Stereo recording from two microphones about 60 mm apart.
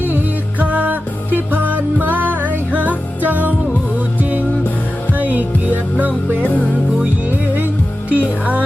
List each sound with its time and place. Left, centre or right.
0.6 s music: right
6.4 s music: left
7.0 s music: right